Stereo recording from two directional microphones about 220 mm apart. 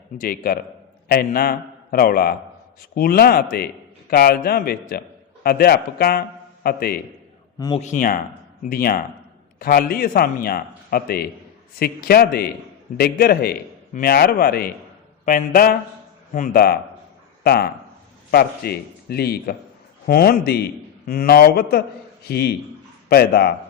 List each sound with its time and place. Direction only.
0.2 s a man's voice: 40° left (ahead or behind)